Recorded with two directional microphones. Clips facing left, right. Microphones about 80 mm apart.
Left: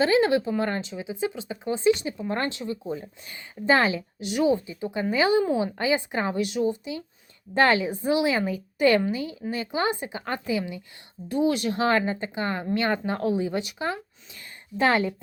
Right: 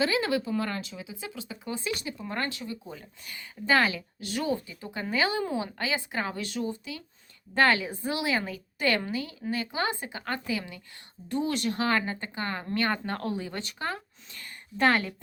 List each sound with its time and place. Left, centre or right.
0.0 s speech: left